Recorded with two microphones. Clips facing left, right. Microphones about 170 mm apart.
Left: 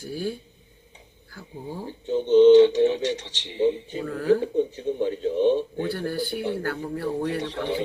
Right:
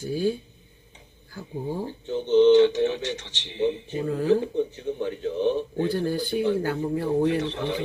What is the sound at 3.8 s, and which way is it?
Speech, 25° right (ahead or behind).